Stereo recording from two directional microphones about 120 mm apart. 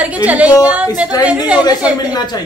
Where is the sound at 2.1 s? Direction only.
35° left (ahead or behind).